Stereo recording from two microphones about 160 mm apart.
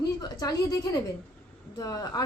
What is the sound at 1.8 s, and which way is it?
Speech, 20° left (ahead or behind).